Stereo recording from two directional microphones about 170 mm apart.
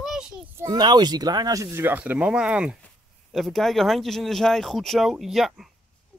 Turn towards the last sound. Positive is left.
turn(degrees=0)  # may be behind; listen again after turning